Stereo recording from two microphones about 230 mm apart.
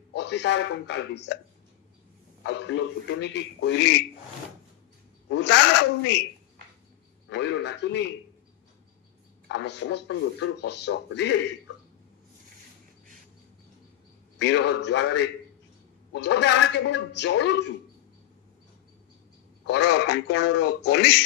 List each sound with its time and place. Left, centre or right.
0.1 s speech: left
2.4 s speech: left
5.3 s speech: left
7.2 s speech: left
9.5 s speech: left
14.4 s speech: left
19.6 s speech: left